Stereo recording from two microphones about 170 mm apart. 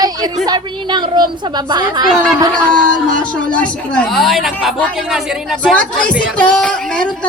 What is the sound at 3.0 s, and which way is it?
A woman's voice, 5° left (ahead or behind).